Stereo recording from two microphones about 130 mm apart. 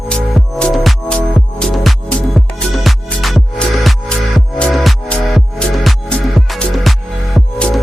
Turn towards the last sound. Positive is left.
turn(degrees=5)  # may be behind; listen again after turning